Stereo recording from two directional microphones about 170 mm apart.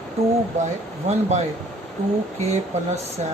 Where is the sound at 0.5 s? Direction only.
45° right (ahead or behind).